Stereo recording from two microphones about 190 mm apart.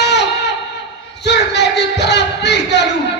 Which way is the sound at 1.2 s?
65° left (ahead or behind).